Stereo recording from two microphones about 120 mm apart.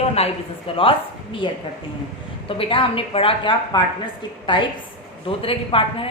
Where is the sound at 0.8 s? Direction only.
50° left (ahead or behind).